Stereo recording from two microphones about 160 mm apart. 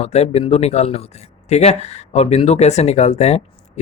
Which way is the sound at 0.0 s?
40° left (ahead or behind).